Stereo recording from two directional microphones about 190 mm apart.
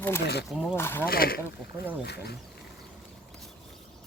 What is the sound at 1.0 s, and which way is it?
Speech, 50° left (ahead or behind).